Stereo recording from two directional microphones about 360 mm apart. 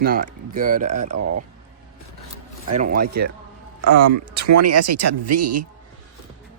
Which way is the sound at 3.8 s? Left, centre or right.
Right.